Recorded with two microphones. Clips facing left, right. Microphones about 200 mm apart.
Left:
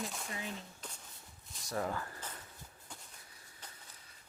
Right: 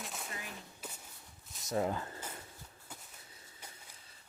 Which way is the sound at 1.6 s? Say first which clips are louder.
Right 3 dB; 20° right (ahead or behind).